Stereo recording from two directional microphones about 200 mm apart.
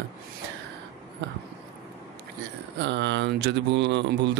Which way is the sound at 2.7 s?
60° right (ahead or behind).